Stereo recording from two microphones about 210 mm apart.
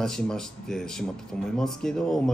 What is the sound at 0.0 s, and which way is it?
A man's voice, 5° left (ahead or behind).